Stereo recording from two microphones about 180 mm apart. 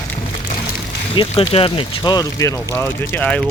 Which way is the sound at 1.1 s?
30° left (ahead or behind).